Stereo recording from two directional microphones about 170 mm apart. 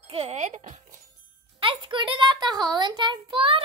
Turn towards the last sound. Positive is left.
turn(degrees=-30)  # may be behind; listen again after turning